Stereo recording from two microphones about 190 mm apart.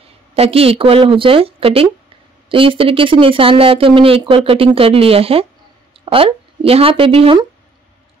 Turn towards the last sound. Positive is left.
turn(degrees=-30)  # may be behind; listen again after turning